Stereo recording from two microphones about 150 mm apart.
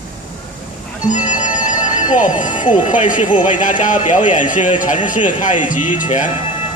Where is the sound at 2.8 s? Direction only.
60° left (ahead or behind).